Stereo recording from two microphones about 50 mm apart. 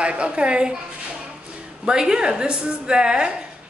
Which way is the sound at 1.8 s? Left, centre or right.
Centre.